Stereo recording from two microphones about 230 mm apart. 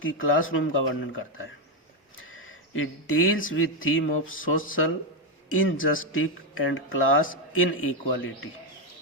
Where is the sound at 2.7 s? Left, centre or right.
Left.